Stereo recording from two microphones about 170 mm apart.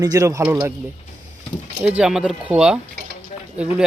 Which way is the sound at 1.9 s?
5° right (ahead or behind).